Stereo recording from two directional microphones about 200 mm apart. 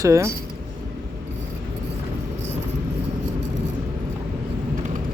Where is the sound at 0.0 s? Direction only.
15° right (ahead or behind).